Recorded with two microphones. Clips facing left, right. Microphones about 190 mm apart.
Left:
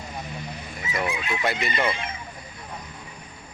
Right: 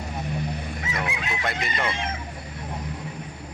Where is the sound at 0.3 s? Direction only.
60° right (ahead or behind).